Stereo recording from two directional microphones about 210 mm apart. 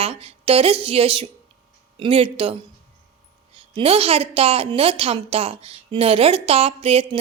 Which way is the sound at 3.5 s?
25° right (ahead or behind).